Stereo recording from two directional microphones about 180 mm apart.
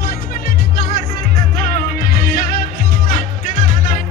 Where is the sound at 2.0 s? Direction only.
55° left (ahead or behind).